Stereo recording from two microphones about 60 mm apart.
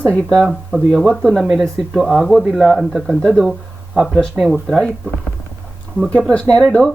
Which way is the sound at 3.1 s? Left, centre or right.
Centre.